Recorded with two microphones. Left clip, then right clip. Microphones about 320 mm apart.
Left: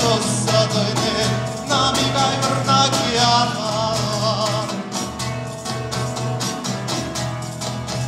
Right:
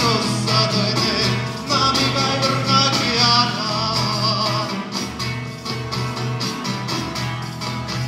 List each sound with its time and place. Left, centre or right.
0.0 s music: left